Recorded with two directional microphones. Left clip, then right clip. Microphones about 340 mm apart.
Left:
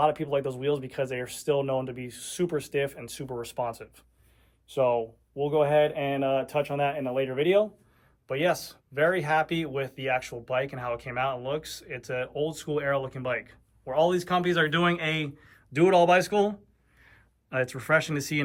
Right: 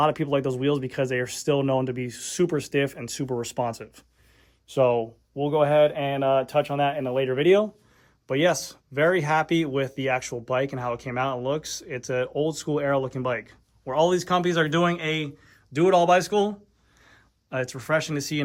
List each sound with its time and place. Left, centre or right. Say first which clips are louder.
0.0 s speech: right 2 dB; right; by 18.4 s centre